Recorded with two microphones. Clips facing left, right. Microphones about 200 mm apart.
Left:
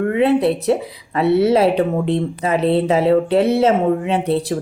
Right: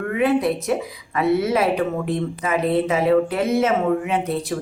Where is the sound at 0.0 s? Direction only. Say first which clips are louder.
Left 4 dB; 30° left (ahead or behind).